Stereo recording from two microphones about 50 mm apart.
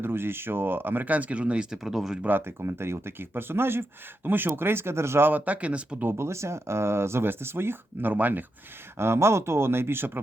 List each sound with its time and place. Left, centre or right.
0.0 s speech: right
1.0 s speech: right
1.7 s speech: centre
2.4 s speech: right
5.3 s speech: right
6.0 s speech: right
8.1 s speech: right
9.0 s speech: right